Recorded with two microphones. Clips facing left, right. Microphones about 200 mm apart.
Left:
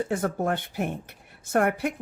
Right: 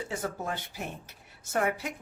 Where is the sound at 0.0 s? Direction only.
55° left (ahead or behind).